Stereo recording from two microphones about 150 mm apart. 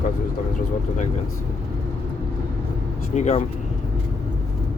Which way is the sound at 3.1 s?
50° left (ahead or behind).